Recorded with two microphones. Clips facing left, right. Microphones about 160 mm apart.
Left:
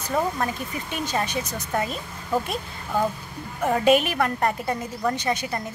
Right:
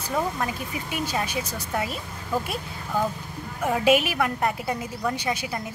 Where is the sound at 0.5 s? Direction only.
10° right (ahead or behind).